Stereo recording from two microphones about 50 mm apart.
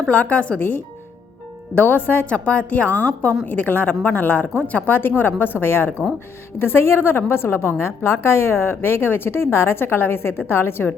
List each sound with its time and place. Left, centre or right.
0.1 s a woman's voice: left
1.7 s a woman's voice: left
2.3 s a woman's voice: left
3.4 s a woman's voice: left